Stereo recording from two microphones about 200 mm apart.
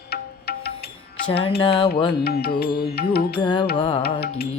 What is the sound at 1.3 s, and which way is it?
Music, 25° left (ahead or behind).